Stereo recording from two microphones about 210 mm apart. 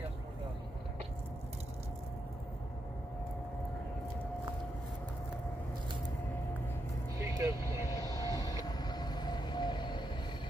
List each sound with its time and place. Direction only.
7.2 s vehicle: 15° right (ahead or behind)
8.3 s vehicle: 15° left (ahead or behind)